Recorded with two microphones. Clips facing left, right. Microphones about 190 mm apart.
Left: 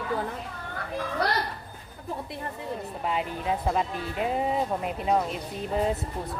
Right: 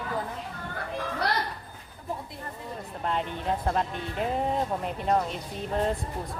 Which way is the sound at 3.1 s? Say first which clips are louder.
Even; 5° left (ahead or behind).